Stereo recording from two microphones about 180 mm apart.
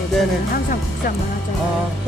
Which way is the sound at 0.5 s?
50° left (ahead or behind).